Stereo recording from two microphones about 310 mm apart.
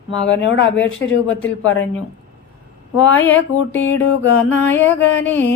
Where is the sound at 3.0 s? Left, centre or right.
Centre.